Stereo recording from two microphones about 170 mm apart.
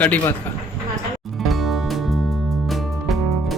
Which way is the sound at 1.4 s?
Centre (ahead or behind).